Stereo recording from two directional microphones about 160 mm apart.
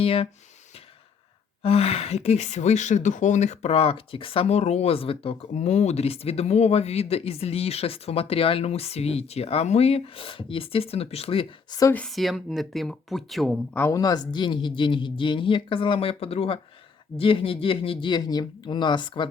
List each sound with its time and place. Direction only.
0.0 s speech: 35° left (ahead or behind)
1.6 s speech: 40° left (ahead or behind)
11.8 s a woman's voice: 15° left (ahead or behind)
12.0 s speech: centre (ahead or behind)
13.7 s speech: 20° left (ahead or behind)